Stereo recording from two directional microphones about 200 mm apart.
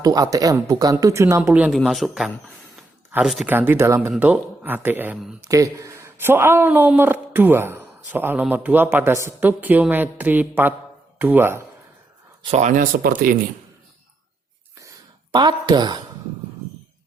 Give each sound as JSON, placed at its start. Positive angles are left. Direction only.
{"t": 0.0, "sound": "speech", "side_deg": -20}
{"t": 5.5, "sound": "speech", "side_deg": -15}
{"t": 12.4, "sound": "speech", "side_deg": -30}
{"t": 14.8, "sound": "a sound", "side_deg": -20}